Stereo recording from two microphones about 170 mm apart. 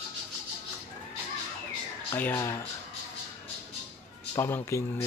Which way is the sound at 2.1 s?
10° left (ahead or behind).